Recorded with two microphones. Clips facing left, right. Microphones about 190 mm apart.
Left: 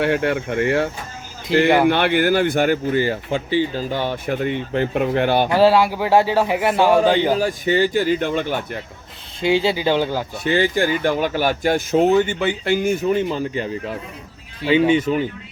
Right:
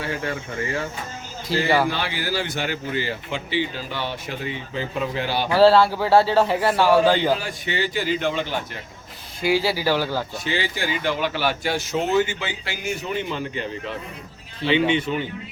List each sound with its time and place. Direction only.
0.0 s speech: 65° left (ahead or behind)
1.5 s speech: 20° left (ahead or behind)
1.9 s speech: 60° left (ahead or behind)
5.5 s speech: 15° left (ahead or behind)
7.3 s speech: 45° left (ahead or behind)
9.4 s speech: 20° left (ahead or behind)
10.4 s speech: 55° left (ahead or behind)
14.7 s speech: 40° left (ahead or behind)